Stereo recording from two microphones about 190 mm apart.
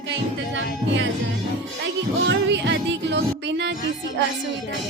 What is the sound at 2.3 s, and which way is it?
Music, 70° right (ahead or behind).